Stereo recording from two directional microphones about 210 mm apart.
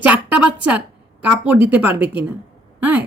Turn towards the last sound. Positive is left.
turn(degrees=-5)  # may be behind; listen again after turning